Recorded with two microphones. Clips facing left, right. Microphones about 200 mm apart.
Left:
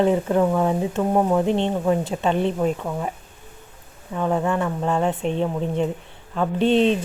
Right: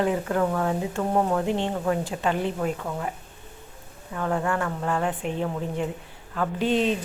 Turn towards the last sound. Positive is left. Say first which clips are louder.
# left 5 dB
turn(degrees=25)  # may be behind; listen again after turning